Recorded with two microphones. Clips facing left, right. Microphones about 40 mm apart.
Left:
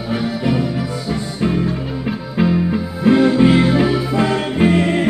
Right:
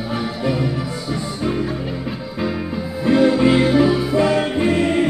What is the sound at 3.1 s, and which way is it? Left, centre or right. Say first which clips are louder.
Music: left 2 dB; centre.